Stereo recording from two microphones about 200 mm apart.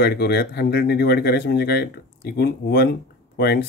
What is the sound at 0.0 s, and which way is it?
Speech, 55° left (ahead or behind).